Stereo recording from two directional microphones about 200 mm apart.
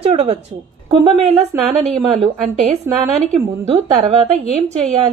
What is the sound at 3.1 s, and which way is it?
Speech, 5° left (ahead or behind).